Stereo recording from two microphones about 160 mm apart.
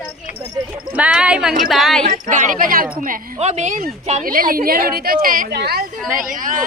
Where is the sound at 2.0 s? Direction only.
50° right (ahead or behind).